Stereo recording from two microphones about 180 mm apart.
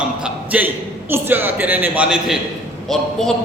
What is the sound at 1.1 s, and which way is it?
A woman's voice, 10° right (ahead or behind).